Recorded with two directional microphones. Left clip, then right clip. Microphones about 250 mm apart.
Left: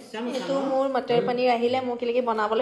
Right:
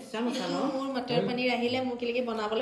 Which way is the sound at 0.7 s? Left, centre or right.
Centre.